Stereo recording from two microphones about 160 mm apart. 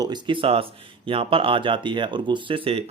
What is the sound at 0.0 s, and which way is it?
Speech, 35° right (ahead or behind).